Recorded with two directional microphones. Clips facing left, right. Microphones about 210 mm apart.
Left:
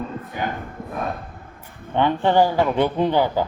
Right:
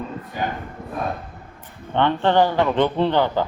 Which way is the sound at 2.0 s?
10° left (ahead or behind).